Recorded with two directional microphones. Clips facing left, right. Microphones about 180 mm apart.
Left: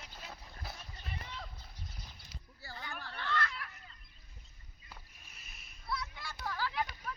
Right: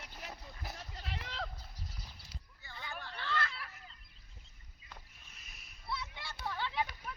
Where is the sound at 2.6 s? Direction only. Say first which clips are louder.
Left 4 dB; 35° left (ahead or behind).